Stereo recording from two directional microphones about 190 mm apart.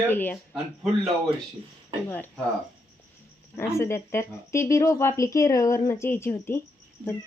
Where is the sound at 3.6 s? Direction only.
15° left (ahead or behind).